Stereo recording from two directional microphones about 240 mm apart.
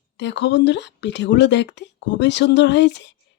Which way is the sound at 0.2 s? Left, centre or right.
Left.